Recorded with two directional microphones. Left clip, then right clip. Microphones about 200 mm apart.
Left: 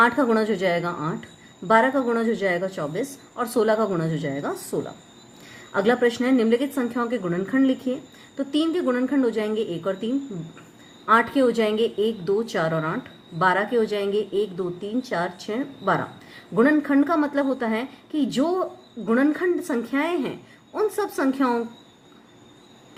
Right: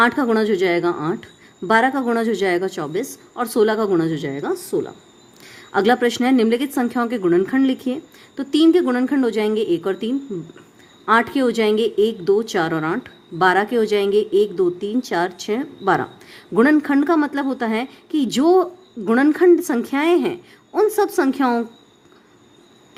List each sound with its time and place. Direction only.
0.0 s a woman's voice: 40° right (ahead or behind)